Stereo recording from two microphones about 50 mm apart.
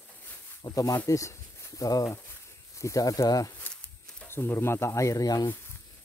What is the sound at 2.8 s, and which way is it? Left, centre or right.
Speech, left.